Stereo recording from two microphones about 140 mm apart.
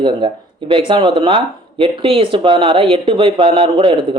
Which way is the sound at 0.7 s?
35° right (ahead or behind).